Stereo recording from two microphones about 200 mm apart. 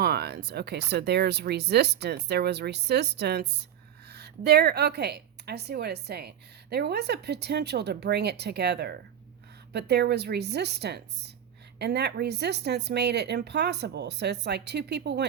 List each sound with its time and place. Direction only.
0.0 s a woman's voice: 55° right (ahead or behind)